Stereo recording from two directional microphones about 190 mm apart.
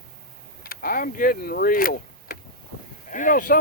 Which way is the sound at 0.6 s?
50° left (ahead or behind).